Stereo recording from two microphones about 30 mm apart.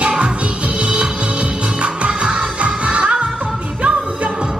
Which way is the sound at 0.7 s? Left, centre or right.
Right.